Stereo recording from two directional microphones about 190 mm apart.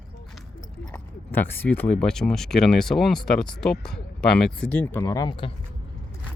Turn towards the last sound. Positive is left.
turn(degrees=25)  # may be behind; listen again after turning